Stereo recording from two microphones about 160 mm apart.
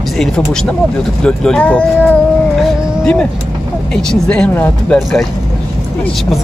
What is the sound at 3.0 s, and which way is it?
Speech, 5° left (ahead or behind).